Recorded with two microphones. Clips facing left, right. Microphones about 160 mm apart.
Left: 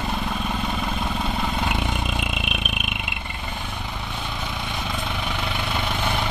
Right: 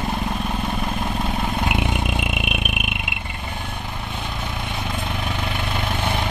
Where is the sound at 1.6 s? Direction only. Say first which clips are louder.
Right 3 dB; 15° right (ahead or behind).